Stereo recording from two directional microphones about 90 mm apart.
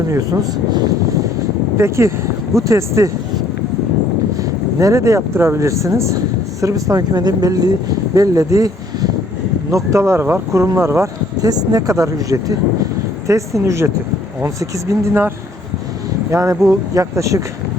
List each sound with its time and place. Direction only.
0.1 s speech: 45° right (ahead or behind)
1.8 s speech: 30° right (ahead or behind)
4.8 s speech: 35° right (ahead or behind)
11.4 s speech: 45° right (ahead or behind)
16.3 s speech: 30° right (ahead or behind)